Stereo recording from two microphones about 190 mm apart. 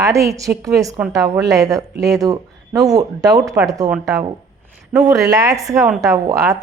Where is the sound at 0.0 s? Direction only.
15° right (ahead or behind).